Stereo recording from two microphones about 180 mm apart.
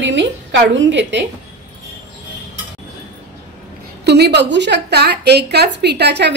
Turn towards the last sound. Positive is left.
turn(degrees=-70)  # may be behind; listen again after turning